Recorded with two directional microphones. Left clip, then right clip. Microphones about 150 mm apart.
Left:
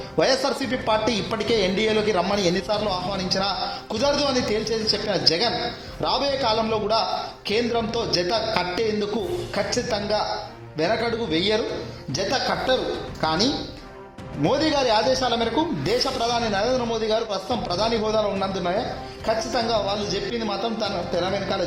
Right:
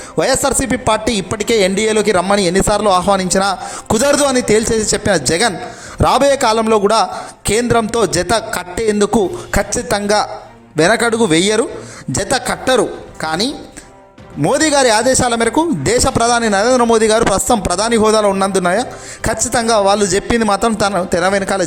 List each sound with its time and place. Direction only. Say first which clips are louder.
0.2 s speech: right 7 dB; 50° right (ahead or behind); by 4.3 s 80° right
4.7 s speech: right 9 dB; 60° right (ahead or behind)
8.5 s speech: right 7 dB; 55° right (ahead or behind)
9.5 s speech: right 8 dB; 50° right (ahead or behind)
14.5 s a man's voice: right 9 dB; 50° right (ahead or behind); by 21.6 s 80° right